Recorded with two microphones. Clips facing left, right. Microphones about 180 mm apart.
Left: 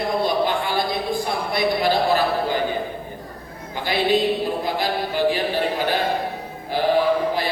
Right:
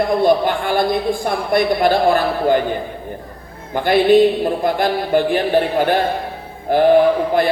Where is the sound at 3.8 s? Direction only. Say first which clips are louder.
Right 9 dB; 55° right (ahead or behind).